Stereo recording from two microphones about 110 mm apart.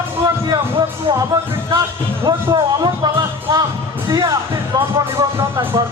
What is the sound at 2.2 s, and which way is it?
Speech, 40° right (ahead or behind).